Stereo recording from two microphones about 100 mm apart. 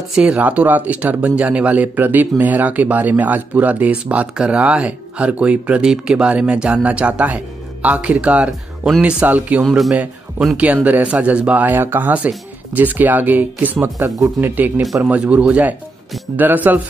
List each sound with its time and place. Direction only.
0.1 s speech: 10° right (ahead or behind)
9.6 s speech: centre (ahead or behind)
10.6 s speech: 15° right (ahead or behind)
13.8 s speech: 30° right (ahead or behind); by 16.8 s 15° right (ahead or behind)